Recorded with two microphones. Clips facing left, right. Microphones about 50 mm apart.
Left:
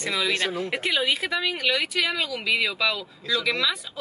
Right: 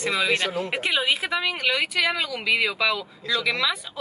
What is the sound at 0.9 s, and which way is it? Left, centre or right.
Speech, centre.